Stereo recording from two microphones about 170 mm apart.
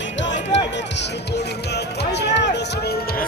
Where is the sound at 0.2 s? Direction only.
90° left.